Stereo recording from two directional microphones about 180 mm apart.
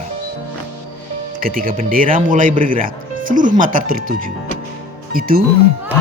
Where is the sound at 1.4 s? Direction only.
50° right (ahead or behind).